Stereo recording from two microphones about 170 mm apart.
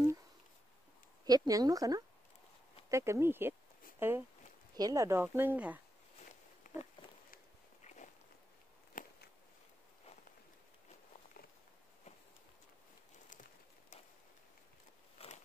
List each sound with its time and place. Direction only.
1.2 s speech: 25° right (ahead or behind)
6.7 s pig: 55° left (ahead or behind)
7.8 s walk: 45° left (ahead or behind)
9.0 s biting: 60° left (ahead or behind)
15.1 s biting: 40° left (ahead or behind)